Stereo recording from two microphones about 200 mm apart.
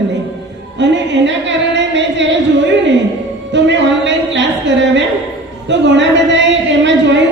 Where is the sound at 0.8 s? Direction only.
65° right (ahead or behind).